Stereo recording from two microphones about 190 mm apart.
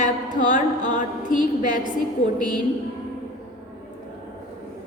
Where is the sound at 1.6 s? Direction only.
45° left (ahead or behind).